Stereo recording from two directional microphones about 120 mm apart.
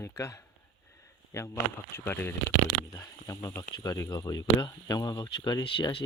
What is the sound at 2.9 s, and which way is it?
Speech, 30° left (ahead or behind).